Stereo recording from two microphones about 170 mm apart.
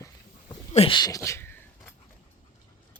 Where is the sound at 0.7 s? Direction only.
30° left (ahead or behind); by 1.9 s 10° left (ahead or behind).